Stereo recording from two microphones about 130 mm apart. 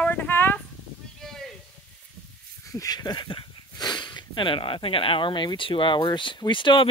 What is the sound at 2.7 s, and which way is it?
Speech, 30° left (ahead or behind).